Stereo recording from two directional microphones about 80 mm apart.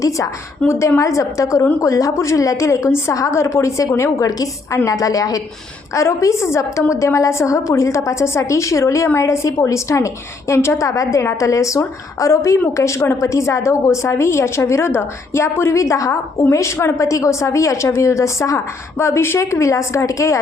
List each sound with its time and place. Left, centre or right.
0.7 s a woman's voice: left